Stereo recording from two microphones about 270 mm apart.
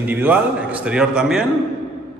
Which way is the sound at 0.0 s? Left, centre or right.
Centre.